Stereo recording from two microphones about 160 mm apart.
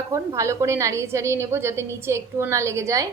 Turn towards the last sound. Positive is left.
turn(degrees=-20)  # may be behind; listen again after turning